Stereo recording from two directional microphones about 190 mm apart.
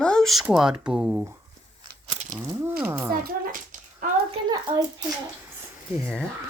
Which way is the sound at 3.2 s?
50° right (ahead or behind).